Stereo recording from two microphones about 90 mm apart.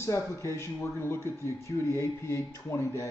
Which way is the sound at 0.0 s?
35° left (ahead or behind).